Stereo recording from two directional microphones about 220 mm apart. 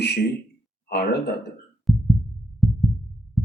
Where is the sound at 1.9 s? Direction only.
Centre (ahead or behind).